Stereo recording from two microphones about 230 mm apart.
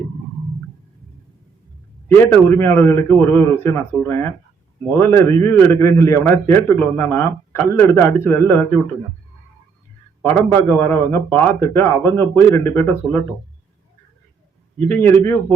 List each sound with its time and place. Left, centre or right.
2.3 s a man's voice: centre
10.2 s a man's voice: centre
14.8 s a man's voice: centre